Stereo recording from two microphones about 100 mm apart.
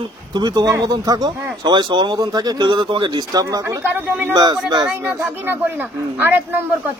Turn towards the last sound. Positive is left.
turn(degrees=-20)  # may be behind; listen again after turning